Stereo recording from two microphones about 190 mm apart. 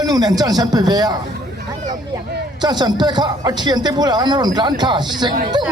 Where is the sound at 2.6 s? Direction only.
20° right (ahead or behind).